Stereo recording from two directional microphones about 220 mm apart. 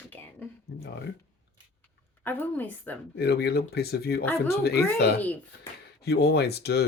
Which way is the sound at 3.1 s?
50° left (ahead or behind).